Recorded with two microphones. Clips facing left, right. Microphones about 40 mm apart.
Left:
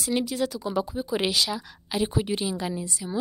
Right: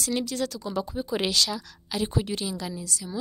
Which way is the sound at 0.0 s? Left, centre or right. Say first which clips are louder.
Left 2 dB; centre.